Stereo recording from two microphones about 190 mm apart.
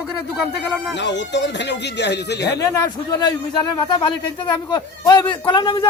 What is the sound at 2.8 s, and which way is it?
A man's voice, 20° left (ahead or behind).